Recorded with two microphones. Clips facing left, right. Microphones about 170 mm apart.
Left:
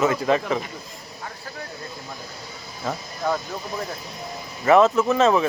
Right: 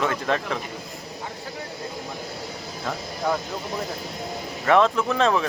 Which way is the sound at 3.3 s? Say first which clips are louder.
Even; 10° right (ahead or behind).